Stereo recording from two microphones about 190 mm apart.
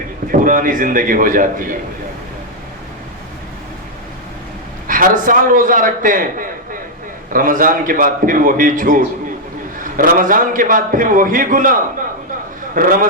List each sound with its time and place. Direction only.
0.3 s a man's voice: 45° right (ahead or behind)
4.9 s a man's voice: 45° right (ahead or behind)